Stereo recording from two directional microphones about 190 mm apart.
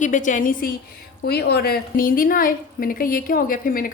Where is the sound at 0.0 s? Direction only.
40° left (ahead or behind).